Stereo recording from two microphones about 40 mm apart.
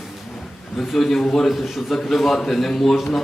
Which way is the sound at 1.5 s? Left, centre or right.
Centre.